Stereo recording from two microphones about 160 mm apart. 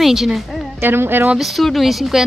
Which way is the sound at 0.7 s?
15° right (ahead or behind).